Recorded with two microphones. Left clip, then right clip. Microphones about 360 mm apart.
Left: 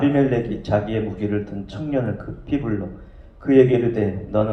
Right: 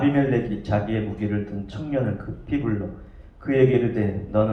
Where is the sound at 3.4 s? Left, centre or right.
Left.